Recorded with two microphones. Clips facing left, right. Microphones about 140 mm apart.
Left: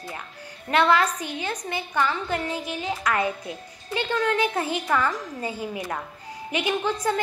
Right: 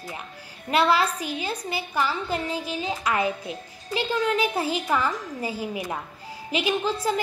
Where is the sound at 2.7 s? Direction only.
20° right (ahead or behind).